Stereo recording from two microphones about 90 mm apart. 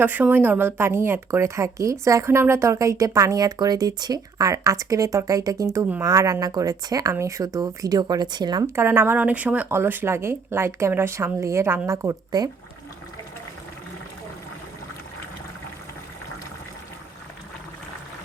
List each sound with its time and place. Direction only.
0.0 s a woman's voice: 20° right (ahead or behind); by 8.6 s 50° right (ahead or behind)
8.6 s speech: 25° right (ahead or behind)